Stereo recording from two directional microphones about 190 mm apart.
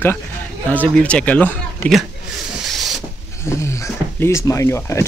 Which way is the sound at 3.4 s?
15° left (ahead or behind).